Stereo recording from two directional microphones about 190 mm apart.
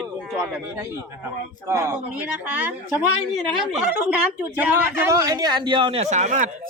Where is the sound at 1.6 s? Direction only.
15° right (ahead or behind).